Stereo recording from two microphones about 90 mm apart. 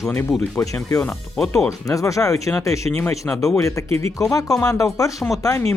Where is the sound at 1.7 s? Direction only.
35° left (ahead or behind).